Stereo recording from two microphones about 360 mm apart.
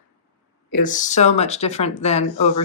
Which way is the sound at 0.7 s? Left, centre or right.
Left.